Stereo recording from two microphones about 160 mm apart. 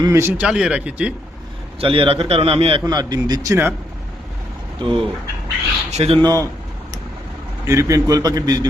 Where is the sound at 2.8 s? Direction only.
25° right (ahead or behind).